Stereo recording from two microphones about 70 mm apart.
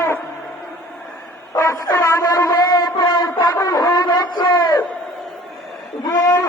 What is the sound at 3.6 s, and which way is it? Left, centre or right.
Speech, left.